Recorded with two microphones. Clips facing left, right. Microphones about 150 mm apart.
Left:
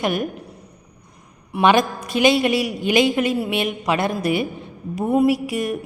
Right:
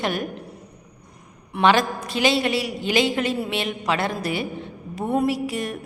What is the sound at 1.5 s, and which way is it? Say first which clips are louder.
A woman's voice: left 2 dB; 15° left (ahead or behind).